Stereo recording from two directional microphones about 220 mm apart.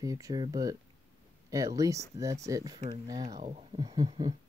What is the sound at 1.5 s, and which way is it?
Speech, 15° right (ahead or behind).